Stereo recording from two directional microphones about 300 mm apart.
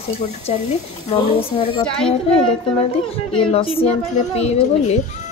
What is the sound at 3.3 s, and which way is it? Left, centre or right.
Speech, centre.